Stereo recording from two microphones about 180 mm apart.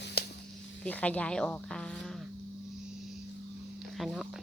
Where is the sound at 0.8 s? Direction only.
10° left (ahead or behind).